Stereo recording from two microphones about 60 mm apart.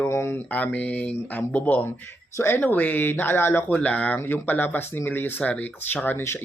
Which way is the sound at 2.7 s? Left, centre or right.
Left.